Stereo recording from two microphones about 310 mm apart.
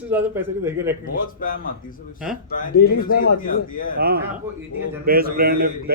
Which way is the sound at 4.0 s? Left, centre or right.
Right.